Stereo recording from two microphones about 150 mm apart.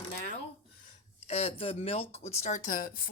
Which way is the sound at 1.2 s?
45° left (ahead or behind).